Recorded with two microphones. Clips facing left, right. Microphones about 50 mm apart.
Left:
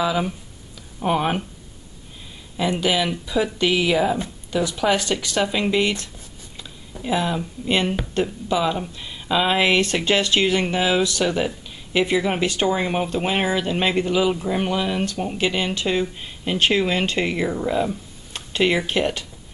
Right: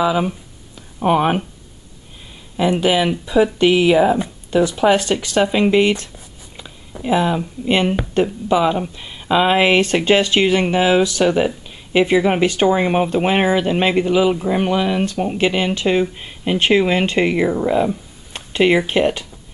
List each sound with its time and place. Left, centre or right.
0.0 s speech: centre
0.7 s a sound: centre
2.5 s speech: centre
9.8 s speech: right